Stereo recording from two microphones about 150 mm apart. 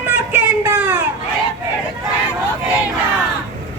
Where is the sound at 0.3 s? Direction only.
10° right (ahead or behind).